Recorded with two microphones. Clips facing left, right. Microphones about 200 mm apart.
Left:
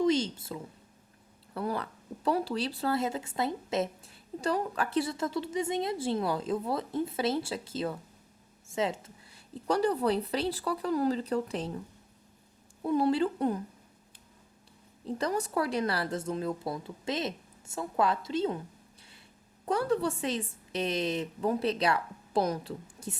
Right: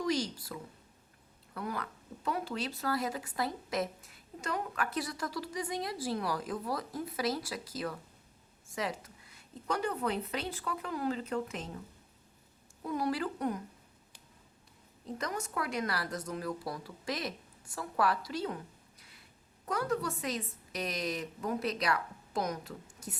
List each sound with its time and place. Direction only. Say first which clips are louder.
0.0 s a woman's voice: left 6 dB; 25° left (ahead or behind)
12.8 s speech: left 7 dB; 30° left (ahead or behind)
15.0 s speech: left 7 dB; 30° left (ahead or behind)
19.6 s speech: left 5 dB; 30° left (ahead or behind)